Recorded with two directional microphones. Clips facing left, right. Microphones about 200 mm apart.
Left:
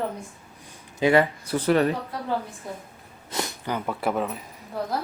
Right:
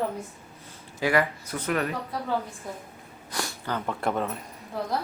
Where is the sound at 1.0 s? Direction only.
25° left (ahead or behind).